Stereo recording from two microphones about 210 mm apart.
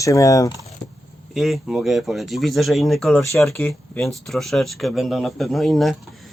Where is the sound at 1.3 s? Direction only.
Centre (ahead or behind).